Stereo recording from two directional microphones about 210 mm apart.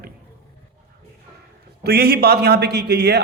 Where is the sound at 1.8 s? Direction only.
50° right (ahead or behind).